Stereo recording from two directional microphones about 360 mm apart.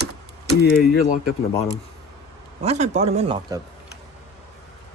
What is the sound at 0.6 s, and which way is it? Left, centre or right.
Speech, left.